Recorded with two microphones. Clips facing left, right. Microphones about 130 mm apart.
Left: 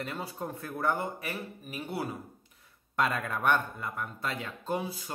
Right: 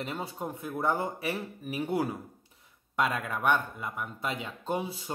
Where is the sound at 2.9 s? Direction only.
5° right (ahead or behind).